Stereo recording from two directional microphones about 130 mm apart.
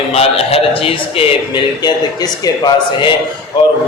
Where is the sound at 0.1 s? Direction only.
50° left (ahead or behind).